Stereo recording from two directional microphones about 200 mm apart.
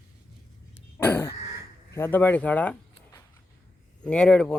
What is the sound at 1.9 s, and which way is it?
Speech, 10° left (ahead or behind).